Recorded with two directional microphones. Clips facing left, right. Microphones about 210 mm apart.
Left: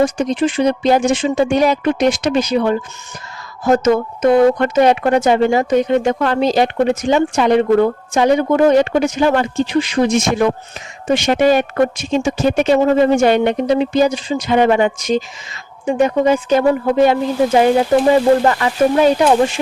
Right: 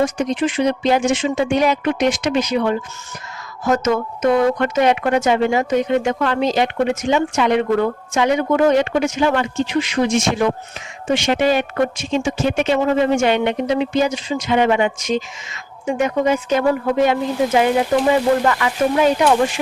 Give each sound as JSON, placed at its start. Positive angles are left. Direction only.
{"t": 0.0, "sound": "speech", "side_deg": 30}